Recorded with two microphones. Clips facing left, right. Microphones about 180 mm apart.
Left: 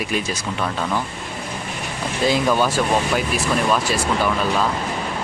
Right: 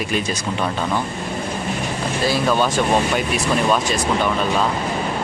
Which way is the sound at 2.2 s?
15° left (ahead or behind).